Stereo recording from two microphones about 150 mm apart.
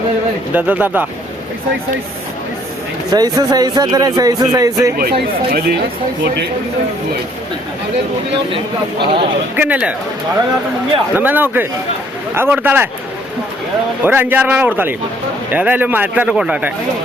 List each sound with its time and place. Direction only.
0.5 s speech: 10° right (ahead or behind)
3.1 s a man's voice: 25° right (ahead or behind)
4.9 s speech: 90° right
8.5 s speech: 35° right (ahead or behind)
9.6 s speech: 10° right (ahead or behind)
11.1 s speech: 10° right (ahead or behind)
14.0 s speech: 15° right (ahead or behind)